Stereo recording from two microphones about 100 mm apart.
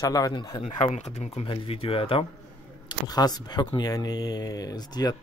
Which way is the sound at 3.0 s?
40° left (ahead or behind).